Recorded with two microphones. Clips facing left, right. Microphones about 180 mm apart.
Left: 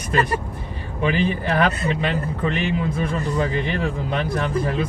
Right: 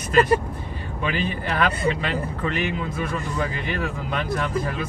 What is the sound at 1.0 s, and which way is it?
Speech, 25° left (ahead or behind).